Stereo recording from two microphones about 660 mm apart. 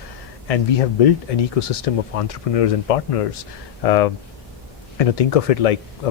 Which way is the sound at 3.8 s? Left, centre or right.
Left.